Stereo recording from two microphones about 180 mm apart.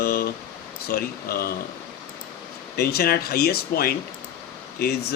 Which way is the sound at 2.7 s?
60° left (ahead or behind).